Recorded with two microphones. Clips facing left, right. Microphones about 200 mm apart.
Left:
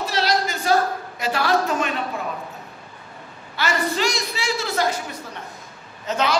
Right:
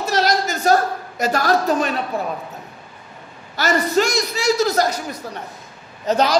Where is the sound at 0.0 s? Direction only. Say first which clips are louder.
Right 3 dB; 45° right (ahead or behind).